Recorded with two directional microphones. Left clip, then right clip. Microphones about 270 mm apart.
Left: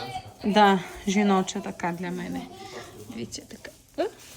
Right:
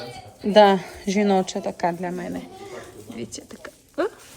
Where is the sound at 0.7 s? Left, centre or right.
Centre.